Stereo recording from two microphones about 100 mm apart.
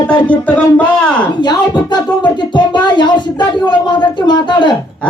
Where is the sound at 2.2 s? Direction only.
50° left (ahead or behind).